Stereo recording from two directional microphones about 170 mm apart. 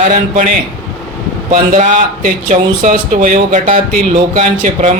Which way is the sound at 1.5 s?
50° right (ahead or behind).